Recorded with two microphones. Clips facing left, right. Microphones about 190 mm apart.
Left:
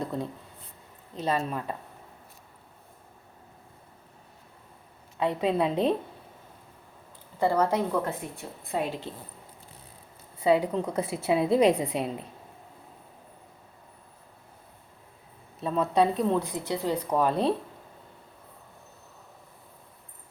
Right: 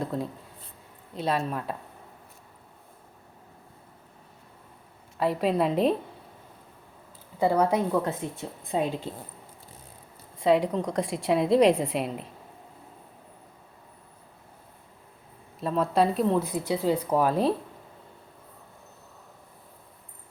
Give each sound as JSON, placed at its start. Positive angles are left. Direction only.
{"t": 0.0, "sound": "a sound", "side_deg": 0}
{"t": 1.2, "sound": "speech", "side_deg": 0}
{"t": 5.2, "sound": "speech", "side_deg": -5}
{"t": 7.3, "sound": "a woman's voice", "side_deg": -10}
{"t": 10.4, "sound": "speech", "side_deg": 5}
{"t": 15.6, "sound": "speech", "side_deg": 0}